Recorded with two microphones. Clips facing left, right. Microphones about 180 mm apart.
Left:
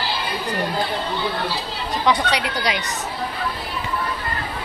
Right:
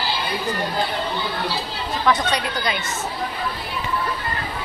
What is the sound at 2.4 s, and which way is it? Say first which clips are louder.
Speech: left 1 dB; 10° left (ahead or behind).